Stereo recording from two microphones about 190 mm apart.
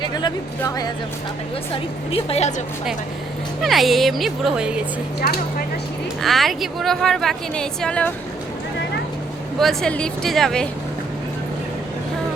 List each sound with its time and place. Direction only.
0.0 s speech: 20° left (ahead or behind)
2.0 s a woman's voice: 30° left (ahead or behind)
3.6 s a woman's voice: centre (ahead or behind)
5.2 s speech: 55° left (ahead or behind)
6.2 s a woman's voice: centre (ahead or behind)
9.6 s a woman's voice: centre (ahead or behind)